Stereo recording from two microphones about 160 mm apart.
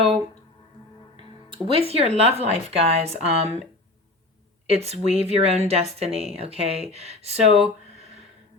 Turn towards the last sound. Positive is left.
turn(degrees=-40)  # may be behind; listen again after turning